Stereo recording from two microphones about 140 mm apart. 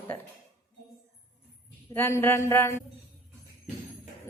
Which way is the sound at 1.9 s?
15° left (ahead or behind).